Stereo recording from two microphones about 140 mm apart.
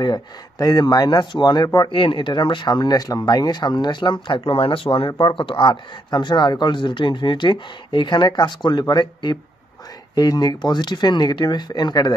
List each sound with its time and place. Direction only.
0.0 s speech: 30° left (ahead or behind)